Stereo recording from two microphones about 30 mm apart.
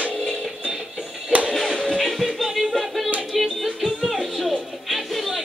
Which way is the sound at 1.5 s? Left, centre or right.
Centre.